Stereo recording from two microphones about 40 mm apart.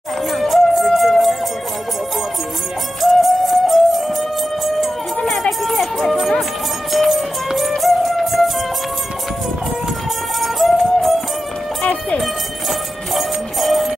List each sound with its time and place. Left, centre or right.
0.3 s music: centre
3.0 s music: centre
5.6 s a sound: centre
6.9 s music: centre
10.4 s music: centre
11.8 s music: left
13.1 s music: centre